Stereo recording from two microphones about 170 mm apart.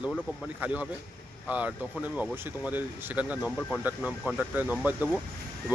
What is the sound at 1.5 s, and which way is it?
Speech, 5° right (ahead or behind).